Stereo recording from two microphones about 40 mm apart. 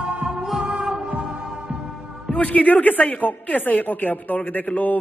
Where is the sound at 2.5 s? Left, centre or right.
Left.